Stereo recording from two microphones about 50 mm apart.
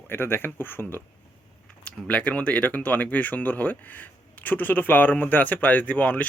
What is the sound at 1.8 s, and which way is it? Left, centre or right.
Speech, left.